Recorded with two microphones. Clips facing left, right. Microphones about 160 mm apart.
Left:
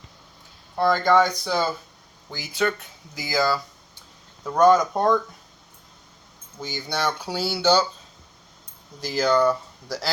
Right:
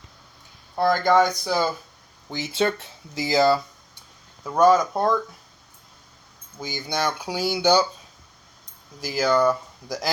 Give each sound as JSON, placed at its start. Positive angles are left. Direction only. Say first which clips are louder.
{"t": 0.8, "sound": "speech", "louder": "even", "side_deg": -10}
{"t": 2.3, "sound": "speech", "louder": "right 2 dB", "side_deg": -25}
{"t": 4.4, "sound": "speech", "louder": "even", "side_deg": -5}
{"t": 6.6, "sound": "speech", "louder": "right 1 dB", "side_deg": -10}
{"t": 9.0, "sound": "speech", "louder": "even", "side_deg": -10}